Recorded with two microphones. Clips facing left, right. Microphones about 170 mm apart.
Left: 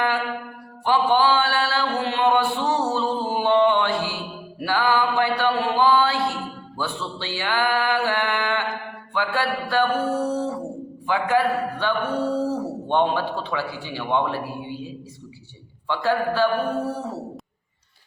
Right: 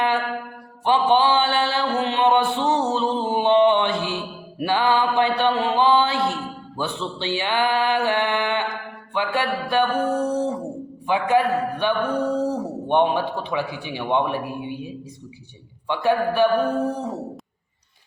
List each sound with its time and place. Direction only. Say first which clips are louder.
0.9 s a sound: right 1 dB; 20° right (ahead or behind)
9.1 s a man's voice: right 1 dB; 20° right (ahead or behind)
15.9 s a man's voice: right 2 dB; 15° right (ahead or behind)